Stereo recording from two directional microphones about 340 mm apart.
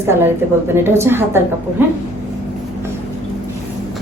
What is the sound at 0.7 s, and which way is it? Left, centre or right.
Speech, centre.